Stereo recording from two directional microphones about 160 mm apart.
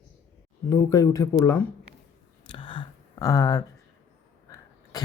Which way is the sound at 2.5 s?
30° left (ahead or behind).